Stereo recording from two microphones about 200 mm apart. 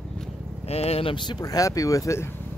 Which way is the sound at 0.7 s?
30° left (ahead or behind).